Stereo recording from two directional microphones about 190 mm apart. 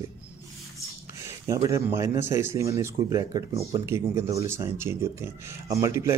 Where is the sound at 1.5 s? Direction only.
15° right (ahead or behind).